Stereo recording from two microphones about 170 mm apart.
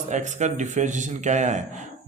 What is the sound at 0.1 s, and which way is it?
A man's voice, 45° right (ahead or behind).